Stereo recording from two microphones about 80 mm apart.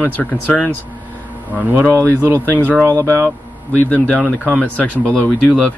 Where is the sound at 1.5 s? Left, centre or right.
Centre.